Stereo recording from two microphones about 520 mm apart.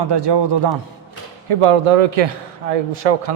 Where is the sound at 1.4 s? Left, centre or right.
Right.